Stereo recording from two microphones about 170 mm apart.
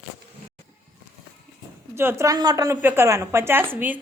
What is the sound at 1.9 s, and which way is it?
A woman's voice, 15° right (ahead or behind).